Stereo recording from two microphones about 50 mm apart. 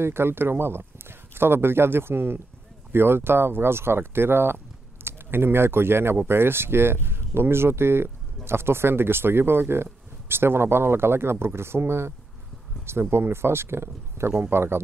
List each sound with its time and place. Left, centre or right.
0.0 s speech: right
13.1 s speech: right